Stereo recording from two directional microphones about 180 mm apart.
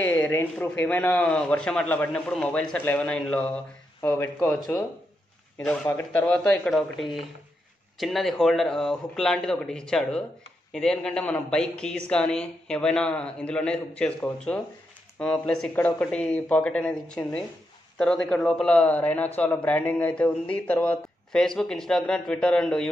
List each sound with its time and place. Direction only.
0.0 s a man's voice: 10° left (ahead or behind)
5.9 s a man's voice: 10° left (ahead or behind)